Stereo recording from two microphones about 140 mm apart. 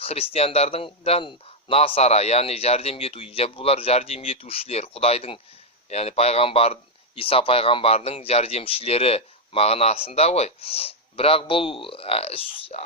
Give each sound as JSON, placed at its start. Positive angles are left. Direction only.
{"t": 0.0, "sound": "speech", "side_deg": 45}